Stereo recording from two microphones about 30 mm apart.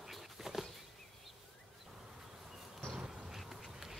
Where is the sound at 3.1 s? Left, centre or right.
Centre.